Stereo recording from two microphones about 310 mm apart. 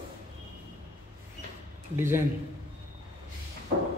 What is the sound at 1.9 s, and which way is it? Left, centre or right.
Speech, centre.